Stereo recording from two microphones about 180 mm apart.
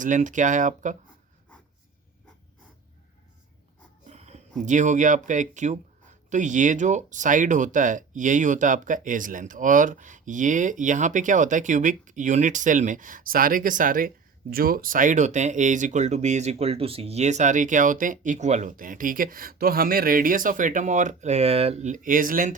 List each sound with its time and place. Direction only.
0.0 s speech: 45° right (ahead or behind)
4.0 s a sound: 40° right (ahead or behind)
4.6 s speech: 40° right (ahead or behind)